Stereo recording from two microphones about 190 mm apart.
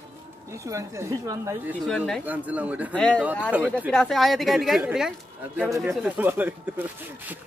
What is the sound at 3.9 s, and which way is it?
A woman's voice, centre (ahead or behind).